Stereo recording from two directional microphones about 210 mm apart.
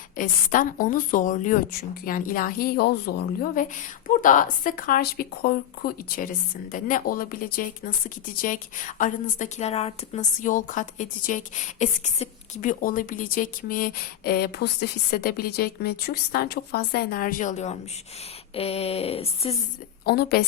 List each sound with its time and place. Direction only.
0.2 s a woman's voice: 40° left (ahead or behind)
18.5 s a sound: 30° left (ahead or behind)
20.1 s a woman's voice: 50° left (ahead or behind)